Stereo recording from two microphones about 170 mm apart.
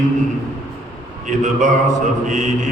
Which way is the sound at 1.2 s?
45° right (ahead or behind).